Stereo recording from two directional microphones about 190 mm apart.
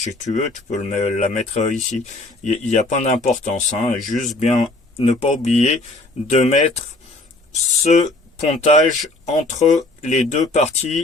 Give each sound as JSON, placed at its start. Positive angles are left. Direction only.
{"t": 0.0, "sound": "speech", "side_deg": 40}